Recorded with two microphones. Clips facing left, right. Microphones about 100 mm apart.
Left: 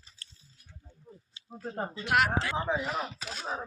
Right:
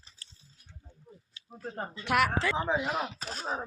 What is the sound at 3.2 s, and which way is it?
Speech, 40° right (ahead or behind).